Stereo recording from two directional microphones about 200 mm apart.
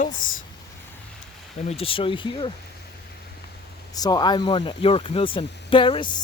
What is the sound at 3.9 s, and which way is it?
Speech, 20° left (ahead or behind).